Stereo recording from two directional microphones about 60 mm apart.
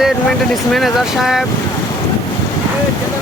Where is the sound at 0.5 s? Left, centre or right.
Centre.